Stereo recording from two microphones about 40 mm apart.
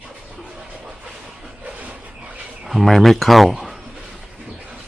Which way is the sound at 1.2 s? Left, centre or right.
Centre.